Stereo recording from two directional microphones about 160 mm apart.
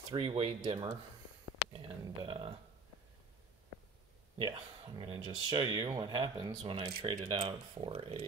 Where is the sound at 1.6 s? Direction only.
90° left.